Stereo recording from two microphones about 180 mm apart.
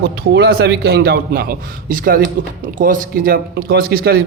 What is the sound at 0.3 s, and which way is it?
A man's voice, 65° right (ahead or behind).